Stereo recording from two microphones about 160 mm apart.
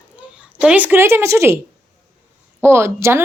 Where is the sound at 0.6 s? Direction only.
10° right (ahead or behind).